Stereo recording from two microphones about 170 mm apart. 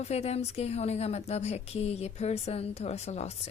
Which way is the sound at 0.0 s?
40° left (ahead or behind).